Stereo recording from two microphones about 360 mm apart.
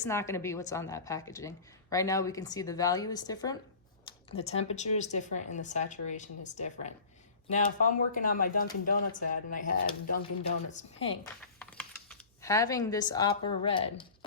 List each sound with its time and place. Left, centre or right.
0.0 s a woman's voice: centre
8.1 s speech: left
11.6 s speech: centre